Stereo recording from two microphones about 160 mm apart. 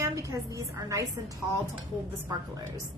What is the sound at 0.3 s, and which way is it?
Speech, 20° right (ahead or behind).